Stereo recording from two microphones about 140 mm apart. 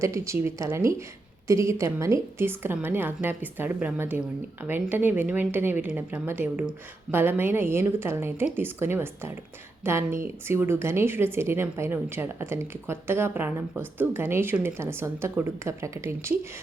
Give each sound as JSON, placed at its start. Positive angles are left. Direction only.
{"t": 0.0, "sound": "a woman's voice", "side_deg": -20}